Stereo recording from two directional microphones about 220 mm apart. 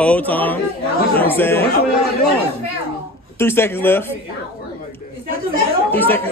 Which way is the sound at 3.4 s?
10° left (ahead or behind).